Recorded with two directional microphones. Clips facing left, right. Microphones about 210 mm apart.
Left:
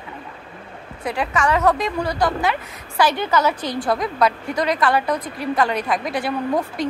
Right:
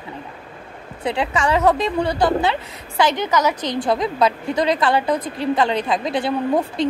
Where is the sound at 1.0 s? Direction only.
25° right (ahead or behind).